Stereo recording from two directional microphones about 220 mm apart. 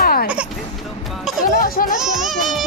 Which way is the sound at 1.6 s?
40° left (ahead or behind).